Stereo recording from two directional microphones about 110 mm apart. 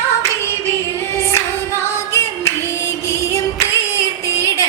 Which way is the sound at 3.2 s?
25° left (ahead or behind).